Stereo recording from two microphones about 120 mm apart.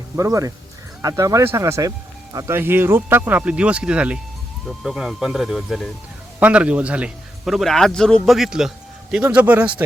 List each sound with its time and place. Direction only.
0.2 s a man's voice: 30° right (ahead or behind); by 5.9 s centre (ahead or behind)
6.4 s a man's voice: 10° right (ahead or behind)